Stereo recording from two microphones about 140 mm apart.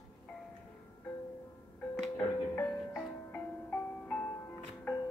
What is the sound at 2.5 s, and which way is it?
Music, 10° left (ahead or behind).